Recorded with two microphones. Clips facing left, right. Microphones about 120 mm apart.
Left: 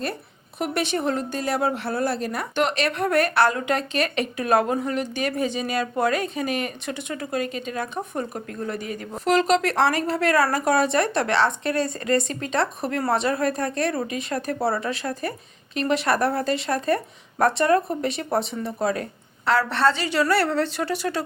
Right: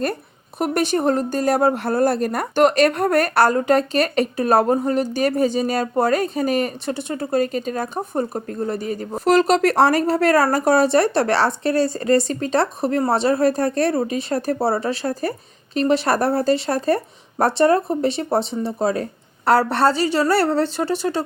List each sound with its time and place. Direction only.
0.6 s speech: 40° right (ahead or behind)
19.5 s speech: 40° right (ahead or behind)